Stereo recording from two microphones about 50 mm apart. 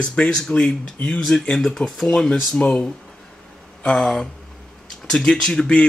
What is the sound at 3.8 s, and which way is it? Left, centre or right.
Speech, centre.